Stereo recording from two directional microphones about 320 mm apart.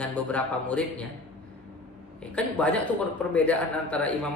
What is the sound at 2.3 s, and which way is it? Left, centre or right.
A man's voice, centre.